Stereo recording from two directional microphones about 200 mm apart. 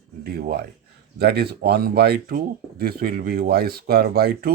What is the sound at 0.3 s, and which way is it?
Speech, 50° right (ahead or behind).